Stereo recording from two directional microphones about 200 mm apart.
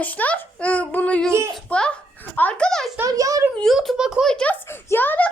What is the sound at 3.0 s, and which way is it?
Speech, 15° right (ahead or behind).